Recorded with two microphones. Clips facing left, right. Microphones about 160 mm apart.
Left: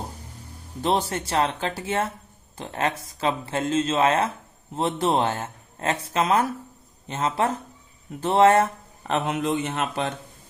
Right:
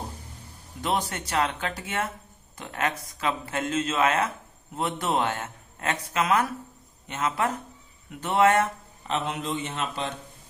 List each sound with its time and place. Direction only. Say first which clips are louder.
0.8 s a man's voice: left 4 dB; 30° left (ahead or behind)
9.0 s a man's voice: left 5 dB; 55° left (ahead or behind)